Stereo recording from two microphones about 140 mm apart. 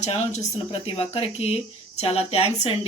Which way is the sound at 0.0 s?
50° left (ahead or behind).